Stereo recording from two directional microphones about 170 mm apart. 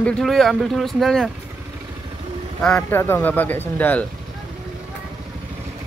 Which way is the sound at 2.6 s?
10° left (ahead or behind).